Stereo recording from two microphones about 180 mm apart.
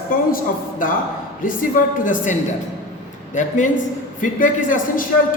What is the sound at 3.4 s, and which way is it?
Speech, 45° left (ahead or behind).